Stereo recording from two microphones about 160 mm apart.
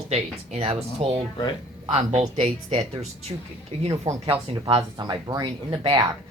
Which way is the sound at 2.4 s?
35° right (ahead or behind).